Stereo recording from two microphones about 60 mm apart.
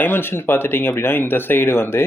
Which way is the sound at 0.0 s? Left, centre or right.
Left.